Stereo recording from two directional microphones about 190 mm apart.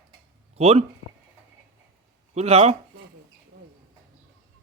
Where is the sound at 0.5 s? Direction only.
35° right (ahead or behind).